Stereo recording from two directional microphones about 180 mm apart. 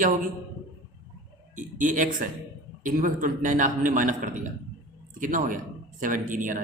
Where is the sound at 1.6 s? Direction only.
45° right (ahead or behind).